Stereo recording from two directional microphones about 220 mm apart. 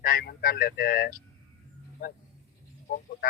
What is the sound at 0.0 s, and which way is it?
Speech, 40° left (ahead or behind).